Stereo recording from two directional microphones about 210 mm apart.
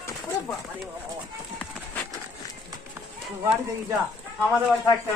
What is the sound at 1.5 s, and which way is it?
Run, 5° left (ahead or behind).